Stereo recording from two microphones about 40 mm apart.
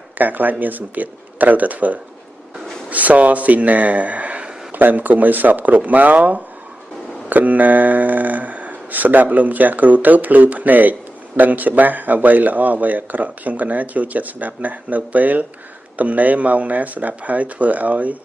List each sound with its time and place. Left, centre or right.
0.2 s speech: right
4.7 s speech: right